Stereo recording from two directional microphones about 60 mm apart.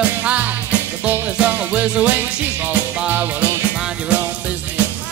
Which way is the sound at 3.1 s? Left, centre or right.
Right.